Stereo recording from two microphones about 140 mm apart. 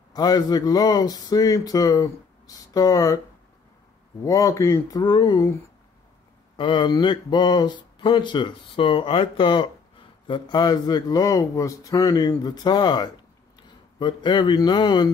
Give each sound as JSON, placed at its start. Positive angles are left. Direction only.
{"t": 0.1, "sound": "speech", "side_deg": 30}
{"t": 4.2, "sound": "speech", "side_deg": 25}
{"t": 6.5, "sound": "speech", "side_deg": 35}